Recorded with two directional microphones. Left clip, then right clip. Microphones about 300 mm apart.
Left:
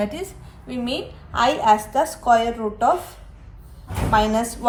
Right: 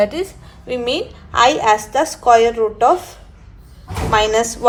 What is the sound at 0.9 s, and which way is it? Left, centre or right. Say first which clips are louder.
A woman's voice: right 7 dB; right.